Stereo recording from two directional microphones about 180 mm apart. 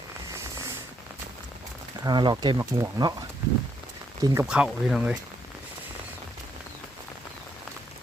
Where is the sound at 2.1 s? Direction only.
25° right (ahead or behind).